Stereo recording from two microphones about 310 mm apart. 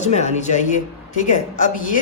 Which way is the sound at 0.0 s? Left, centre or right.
Left.